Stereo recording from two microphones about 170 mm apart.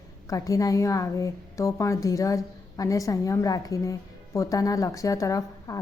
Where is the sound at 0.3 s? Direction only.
20° left (ahead or behind).